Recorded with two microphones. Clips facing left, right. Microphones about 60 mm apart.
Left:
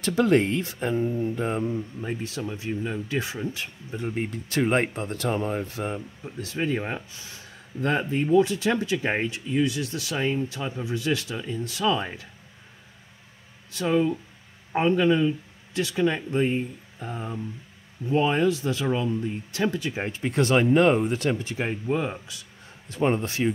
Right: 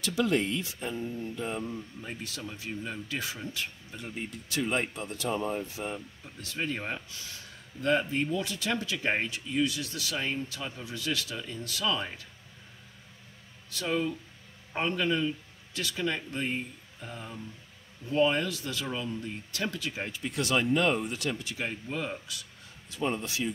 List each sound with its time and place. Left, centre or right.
0.0 s speech: left
1.3 s speech: left
2.0 s speech: left
3.9 s speech: left
6.4 s speech: left
7.1 s speech: left
7.8 s speech: left
13.7 s speech: left
17.0 s speech: left
18.0 s speech: left
20.1 s speech: left
22.8 s speech: left